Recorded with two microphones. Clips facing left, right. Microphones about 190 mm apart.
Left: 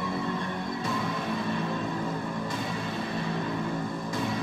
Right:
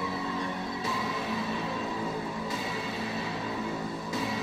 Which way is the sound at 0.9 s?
50° left (ahead or behind).